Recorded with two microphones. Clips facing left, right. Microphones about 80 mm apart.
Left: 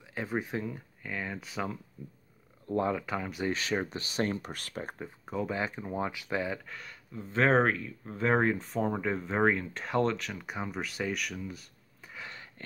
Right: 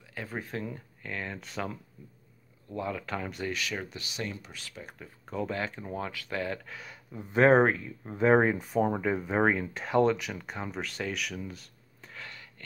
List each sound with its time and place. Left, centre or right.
0.1 s speech: centre
2.7 s speech: left
3.0 s speech: centre
3.4 s speech: left
4.9 s speech: left
5.3 s speech: centre
6.6 s speech: centre
10.4 s speech: centre
12.3 s a sound: left